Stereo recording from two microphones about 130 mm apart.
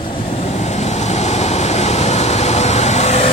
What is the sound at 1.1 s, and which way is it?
Vehicle, 60° left (ahead or behind).